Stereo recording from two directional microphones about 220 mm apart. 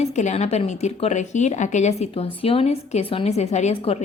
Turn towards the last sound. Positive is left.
turn(degrees=25)  # may be behind; listen again after turning